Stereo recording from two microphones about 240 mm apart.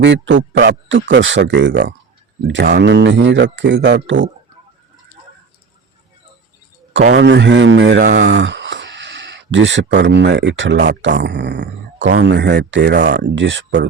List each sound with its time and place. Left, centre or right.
0.0 s speech: right
7.1 s speech: right
7.9 s speech: right
8.3 s speech: right